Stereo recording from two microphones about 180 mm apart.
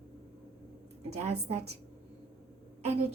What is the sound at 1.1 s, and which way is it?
Speech, 35° right (ahead or behind).